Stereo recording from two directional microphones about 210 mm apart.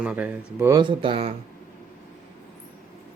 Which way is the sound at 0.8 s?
25° right (ahead or behind).